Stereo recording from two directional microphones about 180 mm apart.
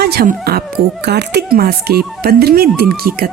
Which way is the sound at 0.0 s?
60° right (ahead or behind).